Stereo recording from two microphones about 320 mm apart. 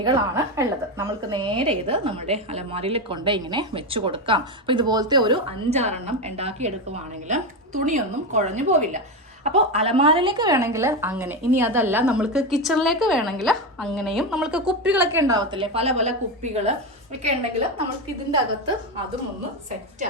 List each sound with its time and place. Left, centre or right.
0.0 s a woman's voice: centre